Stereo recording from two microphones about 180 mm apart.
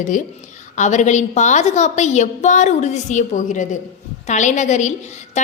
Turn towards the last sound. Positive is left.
turn(degrees=40)  # may be behind; listen again after turning